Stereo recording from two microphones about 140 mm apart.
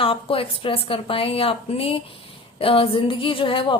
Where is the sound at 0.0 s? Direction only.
40° left (ahead or behind).